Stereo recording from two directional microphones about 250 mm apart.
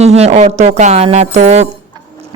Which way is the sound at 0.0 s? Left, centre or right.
Right.